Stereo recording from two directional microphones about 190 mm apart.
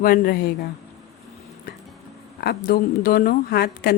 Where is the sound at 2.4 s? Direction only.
55° left (ahead or behind).